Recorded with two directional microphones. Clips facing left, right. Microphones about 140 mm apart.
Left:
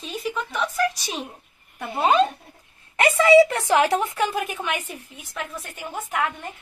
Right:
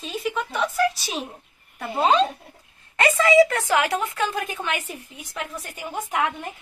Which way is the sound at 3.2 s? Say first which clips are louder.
Left 3 dB; 20° left (ahead or behind).